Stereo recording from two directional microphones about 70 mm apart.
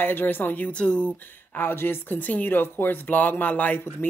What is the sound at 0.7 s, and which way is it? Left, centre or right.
Speech, centre.